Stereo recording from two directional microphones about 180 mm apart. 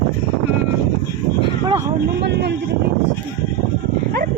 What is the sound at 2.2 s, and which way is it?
Speech, 70° right (ahead or behind).